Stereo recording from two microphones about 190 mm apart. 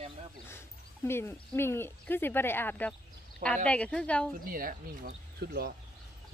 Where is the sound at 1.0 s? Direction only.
10° left (ahead or behind).